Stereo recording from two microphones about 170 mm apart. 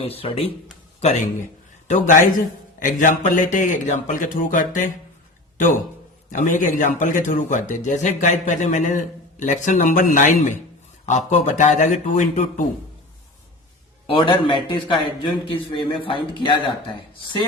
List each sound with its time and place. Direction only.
0.0 s speech: 35° left (ahead or behind)
1.0 s speech: 45° left (ahead or behind)
6.3 s speech: 50° left (ahead or behind)
14.1 s a man's voice: 30° left (ahead or behind)